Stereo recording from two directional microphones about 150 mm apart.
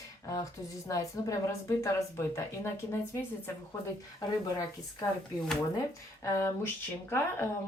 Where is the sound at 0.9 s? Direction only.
20° left (ahead or behind).